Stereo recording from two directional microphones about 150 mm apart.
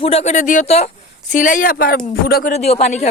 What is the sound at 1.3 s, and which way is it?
Speech, 60° left (ahead or behind).